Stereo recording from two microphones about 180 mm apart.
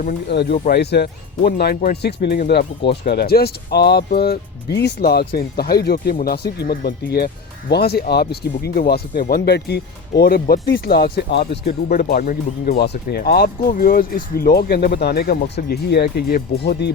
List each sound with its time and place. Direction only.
0.0 s speech: 65° left (ahead or behind)